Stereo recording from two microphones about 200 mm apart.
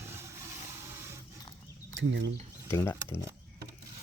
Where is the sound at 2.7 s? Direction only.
10° left (ahead or behind).